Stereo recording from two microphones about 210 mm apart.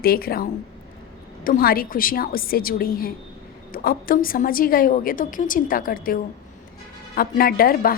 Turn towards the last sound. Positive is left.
turn(degrees=45)  # may be behind; listen again after turning